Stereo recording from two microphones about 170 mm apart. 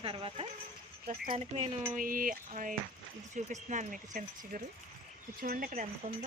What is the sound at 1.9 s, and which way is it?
Speech, 55° right (ahead or behind).